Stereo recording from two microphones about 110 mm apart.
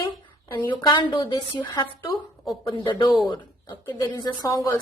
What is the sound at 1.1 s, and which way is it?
A woman's voice, 45° left (ahead or behind).